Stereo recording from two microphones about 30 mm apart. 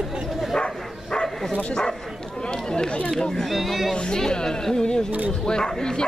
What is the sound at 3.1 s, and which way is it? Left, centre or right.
Speech, centre.